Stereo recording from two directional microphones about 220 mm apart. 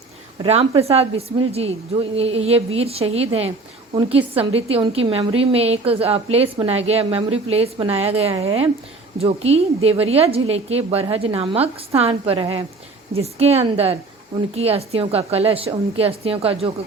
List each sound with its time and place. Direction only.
0.4 s a woman's voice: 25° right (ahead or behind)